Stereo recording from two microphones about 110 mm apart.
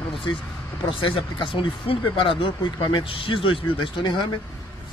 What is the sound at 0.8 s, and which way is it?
Speech, 50° left (ahead or behind).